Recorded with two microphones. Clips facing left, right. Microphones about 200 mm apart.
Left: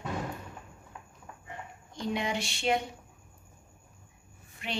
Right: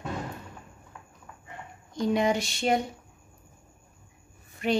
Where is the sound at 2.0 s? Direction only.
40° right (ahead or behind).